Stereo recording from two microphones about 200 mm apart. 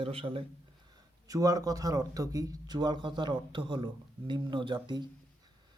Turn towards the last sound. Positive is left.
turn(degrees=-20)  # may be behind; listen again after turning